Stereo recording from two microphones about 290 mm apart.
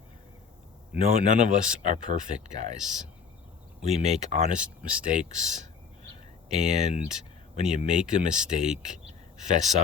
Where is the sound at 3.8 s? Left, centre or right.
Right.